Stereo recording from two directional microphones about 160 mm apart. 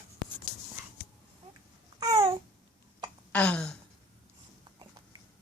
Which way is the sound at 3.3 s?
10° left (ahead or behind).